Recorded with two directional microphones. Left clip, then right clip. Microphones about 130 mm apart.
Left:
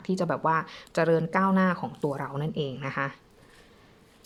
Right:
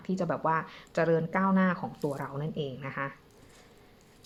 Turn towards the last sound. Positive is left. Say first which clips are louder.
# left 5 dB
turn(degrees=30)  # may be behind; listen again after turning